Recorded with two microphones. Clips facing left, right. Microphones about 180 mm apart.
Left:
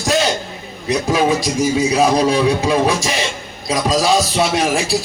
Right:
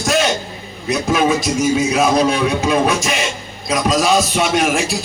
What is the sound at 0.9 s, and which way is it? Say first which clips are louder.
A man's voice: even; 35° left (ahead or behind).